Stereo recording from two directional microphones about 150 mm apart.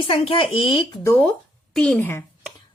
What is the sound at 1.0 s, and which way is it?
A woman's voice, 15° left (ahead or behind).